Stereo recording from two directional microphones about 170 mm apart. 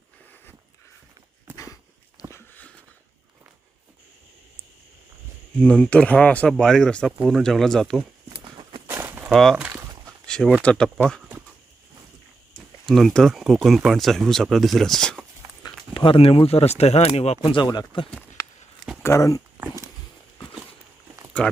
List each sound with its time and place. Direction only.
1.5 s a sound: 20° left (ahead or behind)
5.6 s speech: 5° left (ahead or behind)
8.3 s horse: 30° right (ahead or behind)
8.9 s walk: 15° right (ahead or behind)
9.3 s speech: centre (ahead or behind)
10.2 s a sound: 5° left (ahead or behind)
10.6 s speech: 5° left (ahead or behind)
12.8 s speech: centre (ahead or behind)
15.6 s speech: 30° left (ahead or behind)
19.5 s a sound: 15° right (ahead or behind)
21.4 s speech: 5° left (ahead or behind)